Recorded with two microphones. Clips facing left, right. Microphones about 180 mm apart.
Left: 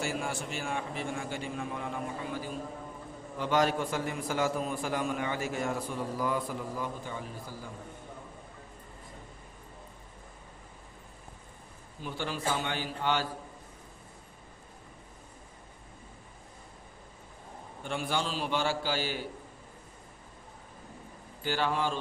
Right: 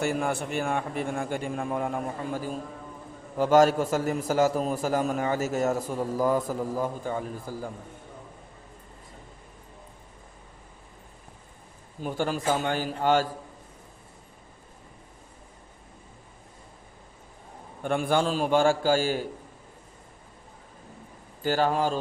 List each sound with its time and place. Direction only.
0.0 s a man's voice: 60° right (ahead or behind)
12.0 s a man's voice: 45° right (ahead or behind)
17.8 s a man's voice: 50° right (ahead or behind)
21.4 s a man's voice: 45° right (ahead or behind)